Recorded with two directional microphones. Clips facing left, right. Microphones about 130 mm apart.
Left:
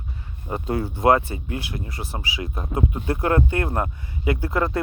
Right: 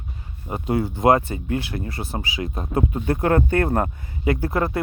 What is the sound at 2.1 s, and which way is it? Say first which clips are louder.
Speech: right 3 dB; 45° right (ahead or behind).